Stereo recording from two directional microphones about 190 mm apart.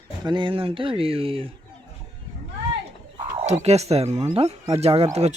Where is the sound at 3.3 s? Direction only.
35° right (ahead or behind).